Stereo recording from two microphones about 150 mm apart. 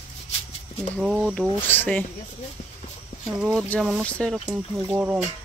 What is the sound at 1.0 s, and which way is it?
Speech, 5° right (ahead or behind).